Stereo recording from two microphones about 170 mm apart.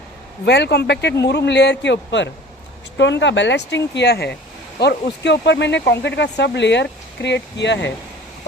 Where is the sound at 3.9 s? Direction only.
75° left (ahead or behind); by 7.9 s 90° left.